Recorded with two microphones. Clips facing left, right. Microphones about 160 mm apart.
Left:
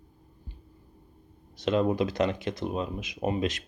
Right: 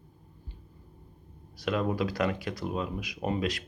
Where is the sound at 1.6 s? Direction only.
25° left (ahead or behind).